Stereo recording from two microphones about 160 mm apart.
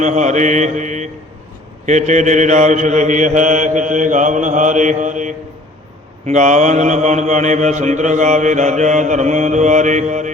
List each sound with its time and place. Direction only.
0.0 s mantra: 50° right (ahead or behind)